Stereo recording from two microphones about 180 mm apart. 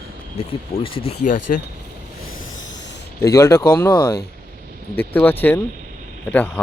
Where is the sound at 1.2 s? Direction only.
45° left (ahead or behind).